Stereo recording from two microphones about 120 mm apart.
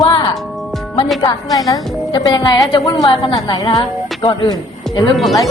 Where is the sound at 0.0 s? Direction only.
40° left (ahead or behind).